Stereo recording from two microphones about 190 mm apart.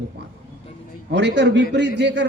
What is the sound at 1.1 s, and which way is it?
A man's voice, 65° right (ahead or behind).